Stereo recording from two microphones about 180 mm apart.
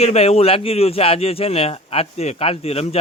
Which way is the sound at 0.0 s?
35° left (ahead or behind).